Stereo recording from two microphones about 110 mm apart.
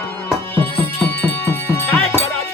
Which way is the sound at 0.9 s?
15° left (ahead or behind).